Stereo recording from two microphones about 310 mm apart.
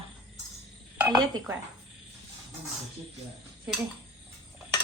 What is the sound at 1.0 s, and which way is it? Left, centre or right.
Speech, centre.